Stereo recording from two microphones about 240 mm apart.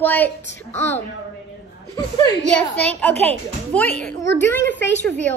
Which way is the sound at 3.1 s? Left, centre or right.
Right.